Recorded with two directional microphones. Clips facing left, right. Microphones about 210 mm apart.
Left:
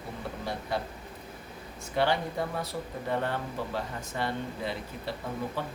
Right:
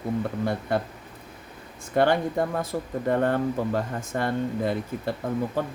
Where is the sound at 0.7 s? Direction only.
55° right (ahead or behind).